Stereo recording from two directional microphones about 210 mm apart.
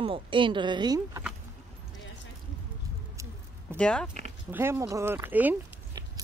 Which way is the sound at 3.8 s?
5° left (ahead or behind).